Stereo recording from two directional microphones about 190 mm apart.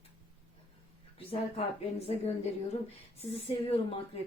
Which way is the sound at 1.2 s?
30° left (ahead or behind).